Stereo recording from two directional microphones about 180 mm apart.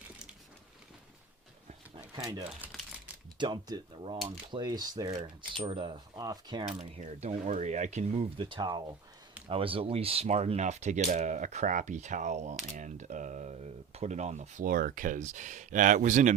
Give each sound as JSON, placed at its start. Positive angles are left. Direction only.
{"t": 2.6, "sound": "crumpling", "side_deg": -5}
{"t": 3.3, "sound": "speech", "side_deg": -25}
{"t": 6.7, "sound": "speech", "side_deg": -35}